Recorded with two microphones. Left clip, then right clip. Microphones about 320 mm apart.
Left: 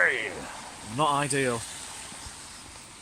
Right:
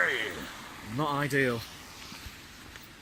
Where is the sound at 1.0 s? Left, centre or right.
Centre.